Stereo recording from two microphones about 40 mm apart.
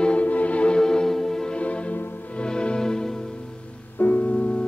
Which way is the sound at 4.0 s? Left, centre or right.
Left.